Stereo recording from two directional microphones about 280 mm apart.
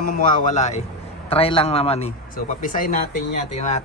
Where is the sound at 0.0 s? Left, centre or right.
Left.